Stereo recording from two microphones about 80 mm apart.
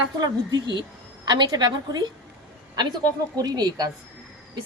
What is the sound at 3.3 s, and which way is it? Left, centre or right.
Speech, right.